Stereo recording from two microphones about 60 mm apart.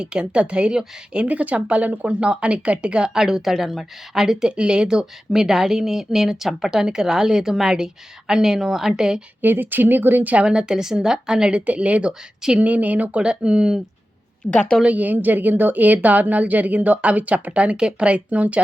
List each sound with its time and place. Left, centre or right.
0.0 s a woman's voice: centre
9.4 s speech: right
10.3 s a woman's voice: centre
12.5 s a woman's voice: right; by 14.6 s centre
14.8 s speech: right